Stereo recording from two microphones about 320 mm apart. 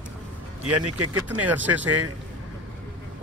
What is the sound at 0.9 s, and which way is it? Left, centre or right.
Speech, right.